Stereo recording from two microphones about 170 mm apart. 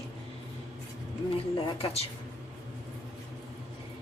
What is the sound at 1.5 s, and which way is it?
Speech, 35° left (ahead or behind).